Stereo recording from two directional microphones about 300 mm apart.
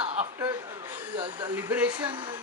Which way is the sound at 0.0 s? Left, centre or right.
Centre.